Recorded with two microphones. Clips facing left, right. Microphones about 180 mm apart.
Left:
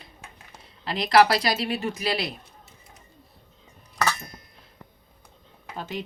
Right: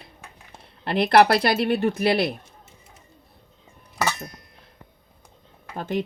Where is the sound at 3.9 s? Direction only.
20° right (ahead or behind).